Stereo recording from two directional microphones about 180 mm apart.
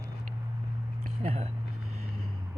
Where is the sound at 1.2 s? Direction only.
35° right (ahead or behind).